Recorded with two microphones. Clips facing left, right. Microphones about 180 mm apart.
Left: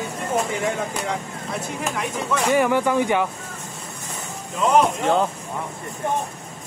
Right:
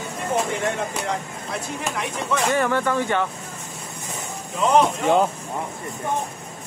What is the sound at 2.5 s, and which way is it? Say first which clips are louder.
Speech: left 3 dB; 10° left (ahead or behind).